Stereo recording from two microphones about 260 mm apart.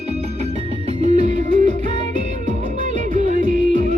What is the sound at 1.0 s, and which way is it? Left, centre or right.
Music, right.